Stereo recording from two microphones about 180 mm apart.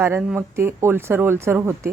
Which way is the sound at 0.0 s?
10° right (ahead or behind).